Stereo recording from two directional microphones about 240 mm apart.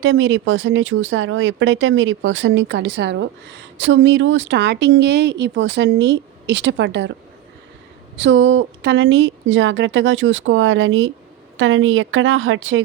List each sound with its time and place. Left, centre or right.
0.0 s speech: right
8.2 s a woman's voice: right